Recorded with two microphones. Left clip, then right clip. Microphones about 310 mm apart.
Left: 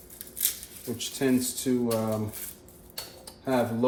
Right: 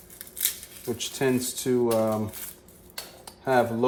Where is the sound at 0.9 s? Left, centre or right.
Right.